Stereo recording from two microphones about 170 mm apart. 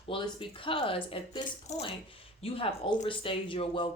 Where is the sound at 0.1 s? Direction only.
30° left (ahead or behind).